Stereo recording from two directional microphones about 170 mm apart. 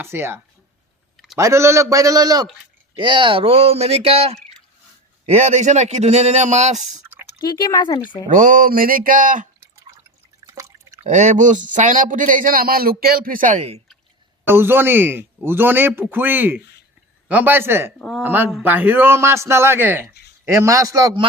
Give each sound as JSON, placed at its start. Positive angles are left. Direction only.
{"t": 0.0, "sound": "speech", "side_deg": -15}
{"t": 1.1, "sound": "a sound", "side_deg": 0}
{"t": 1.4, "sound": "a man's voice", "side_deg": -15}
{"t": 5.4, "sound": "speech", "side_deg": -45}
{"t": 7.4, "sound": "speech", "side_deg": 25}
{"t": 8.3, "sound": "speech", "side_deg": -55}
{"t": 10.5, "sound": "drip", "side_deg": -20}
{"t": 11.0, "sound": "speech", "side_deg": -45}
{"t": 14.4, "sound": "a man's voice", "side_deg": -15}